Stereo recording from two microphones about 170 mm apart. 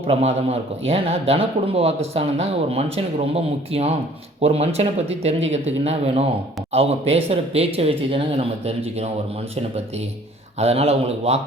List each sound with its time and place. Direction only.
0.1 s a man's voice: 35° right (ahead or behind)
10.6 s a man's voice: 35° right (ahead or behind)